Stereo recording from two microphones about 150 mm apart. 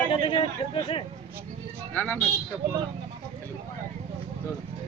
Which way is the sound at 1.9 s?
10° left (ahead or behind).